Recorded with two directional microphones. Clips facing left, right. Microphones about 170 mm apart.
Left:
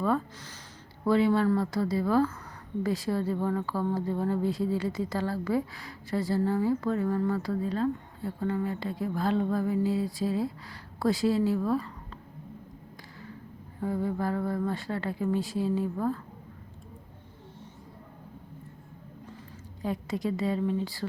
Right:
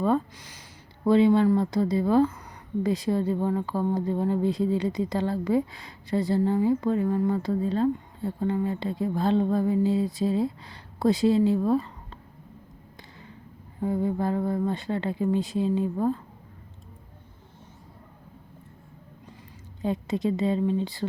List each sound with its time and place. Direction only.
0.0 s speech: 20° right (ahead or behind)
13.8 s speech: 20° right (ahead or behind)
19.8 s speech: 20° right (ahead or behind)